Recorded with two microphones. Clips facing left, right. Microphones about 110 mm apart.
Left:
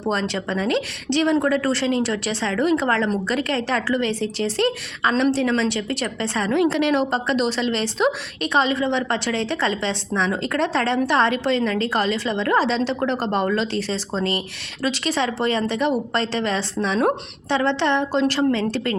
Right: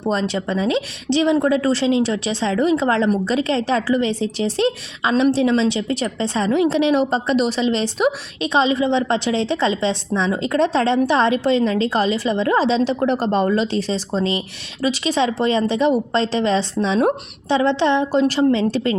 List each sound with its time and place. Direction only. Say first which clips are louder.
0.0 s a woman's voice: right 3 dB; 15° right (ahead or behind)